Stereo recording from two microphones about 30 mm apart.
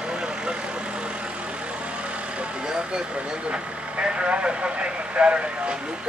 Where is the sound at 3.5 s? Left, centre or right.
Right.